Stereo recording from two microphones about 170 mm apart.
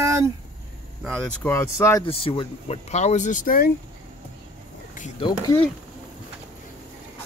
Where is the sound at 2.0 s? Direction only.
35° left (ahead or behind); by 3.7 s 55° left (ahead or behind).